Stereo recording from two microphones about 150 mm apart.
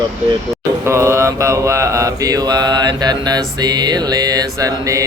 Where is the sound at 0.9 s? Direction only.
20° right (ahead or behind).